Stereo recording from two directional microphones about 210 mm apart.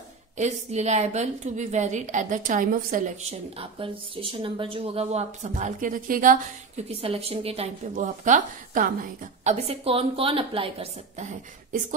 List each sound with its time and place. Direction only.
0.4 s a woman's voice: 30° right (ahead or behind)
6.9 s a woman's voice: 25° right (ahead or behind)